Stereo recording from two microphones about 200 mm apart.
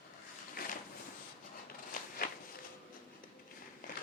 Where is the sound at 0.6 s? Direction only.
45° left (ahead or behind).